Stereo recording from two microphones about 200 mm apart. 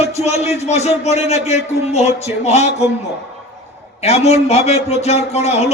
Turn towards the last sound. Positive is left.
turn(degrees=35)  # may be behind; listen again after turning